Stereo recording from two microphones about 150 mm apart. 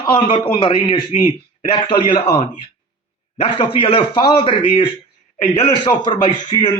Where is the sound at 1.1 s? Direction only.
50° left (ahead or behind).